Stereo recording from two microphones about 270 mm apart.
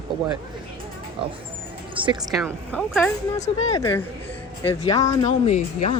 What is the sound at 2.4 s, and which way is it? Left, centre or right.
Speech, centre.